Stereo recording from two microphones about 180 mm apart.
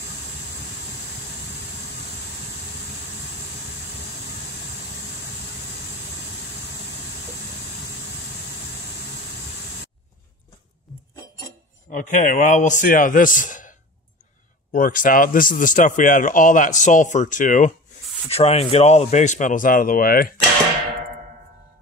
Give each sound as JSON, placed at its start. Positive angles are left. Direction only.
{"t": 11.9, "sound": "speech", "side_deg": 45}
{"t": 18.3, "sound": "speech", "side_deg": 35}